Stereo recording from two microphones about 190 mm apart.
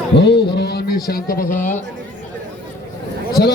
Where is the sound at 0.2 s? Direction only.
60° left (ahead or behind).